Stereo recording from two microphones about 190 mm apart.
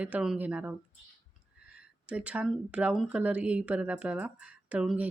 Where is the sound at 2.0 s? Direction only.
5° right (ahead or behind).